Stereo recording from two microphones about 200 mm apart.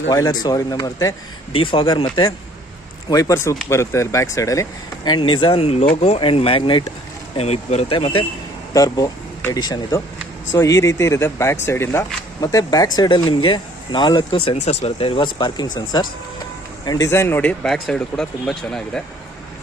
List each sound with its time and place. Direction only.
0.1 s speech: 20° left (ahead or behind)
8.7 s speech: 20° left (ahead or behind); by 19.0 s centre (ahead or behind)